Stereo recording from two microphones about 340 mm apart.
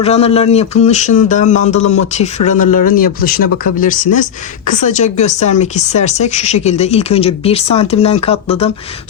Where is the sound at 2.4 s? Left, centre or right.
Left.